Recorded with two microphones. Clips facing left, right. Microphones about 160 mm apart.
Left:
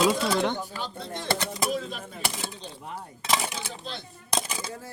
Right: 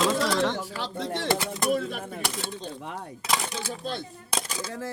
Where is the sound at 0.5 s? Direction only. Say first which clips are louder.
Right 2 dB; 90° right.